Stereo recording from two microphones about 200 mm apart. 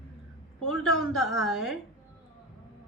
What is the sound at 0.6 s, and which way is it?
Speech, 5° left (ahead or behind).